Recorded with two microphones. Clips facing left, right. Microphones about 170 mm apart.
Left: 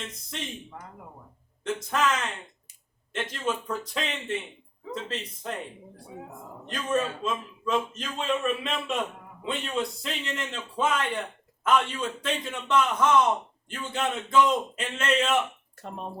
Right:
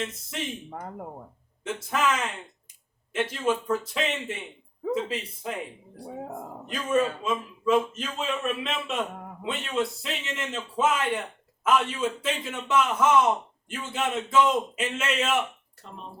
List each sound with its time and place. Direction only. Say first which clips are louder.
0.7 s speech: right 7 dB; 50° right (ahead or behind)
1.6 s a man's voice: even; 5° right (ahead or behind)
6.7 s a man's voice: right 3 dB; 10° right (ahead or behind)
15.8 s speech: left 6 dB; 55° left (ahead or behind)